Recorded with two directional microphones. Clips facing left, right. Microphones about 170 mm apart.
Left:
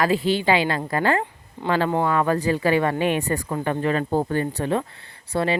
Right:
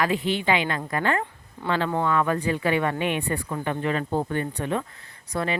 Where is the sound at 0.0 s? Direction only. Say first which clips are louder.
Left 4 dB; 35° left (ahead or behind).